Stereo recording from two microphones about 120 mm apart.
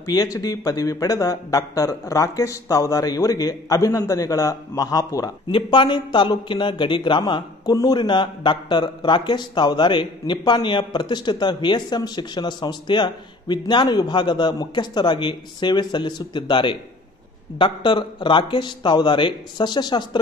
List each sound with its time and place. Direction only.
0.0 s speech: 30° left (ahead or behind)
5.5 s speech: 40° left (ahead or behind)